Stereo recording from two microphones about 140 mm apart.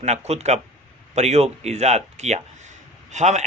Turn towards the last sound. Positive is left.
turn(degrees=-55)  # may be behind; listen again after turning